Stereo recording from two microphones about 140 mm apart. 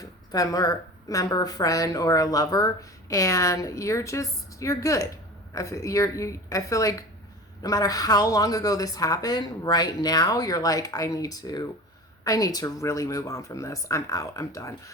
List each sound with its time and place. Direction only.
0.0 s speech: 25° left (ahead or behind)